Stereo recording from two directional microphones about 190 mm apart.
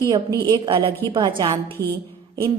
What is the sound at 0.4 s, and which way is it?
A woman's voice, 25° right (ahead or behind).